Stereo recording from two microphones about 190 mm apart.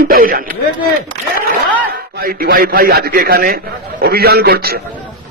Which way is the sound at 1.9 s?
50° right (ahead or behind).